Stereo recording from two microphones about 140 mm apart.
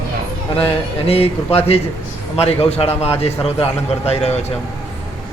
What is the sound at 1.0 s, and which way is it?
Speech, 45° left (ahead or behind).